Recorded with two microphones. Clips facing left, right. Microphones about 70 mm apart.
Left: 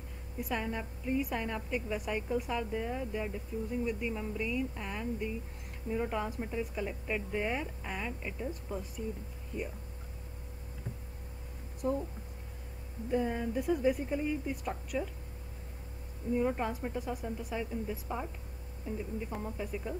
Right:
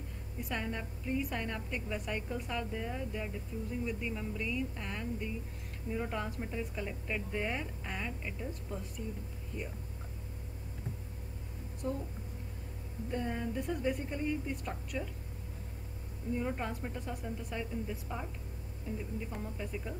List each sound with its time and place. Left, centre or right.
0.4 s a woman's voice: centre
11.8 s a woman's voice: centre
13.1 s a woman's voice: centre
16.3 s a woman's voice: centre